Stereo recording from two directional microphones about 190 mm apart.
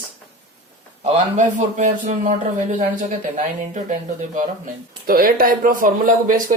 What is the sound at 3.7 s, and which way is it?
Speech, 40° right (ahead or behind).